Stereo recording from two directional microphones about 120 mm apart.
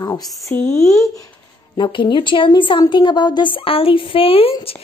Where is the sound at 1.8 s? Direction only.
45° left (ahead or behind).